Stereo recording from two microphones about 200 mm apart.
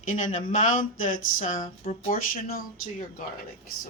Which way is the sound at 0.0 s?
40° left (ahead or behind).